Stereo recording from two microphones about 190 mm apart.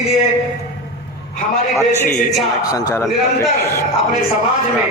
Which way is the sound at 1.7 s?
10° left (ahead or behind).